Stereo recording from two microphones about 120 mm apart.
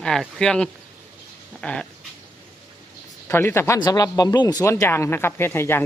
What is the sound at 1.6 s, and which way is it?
Dog, 10° left (ahead or behind).